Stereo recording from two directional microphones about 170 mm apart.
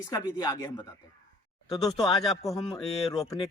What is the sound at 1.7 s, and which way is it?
Speech, 20° left (ahead or behind).